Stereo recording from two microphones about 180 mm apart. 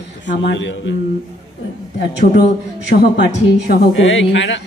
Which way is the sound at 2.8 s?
70° left (ahead or behind).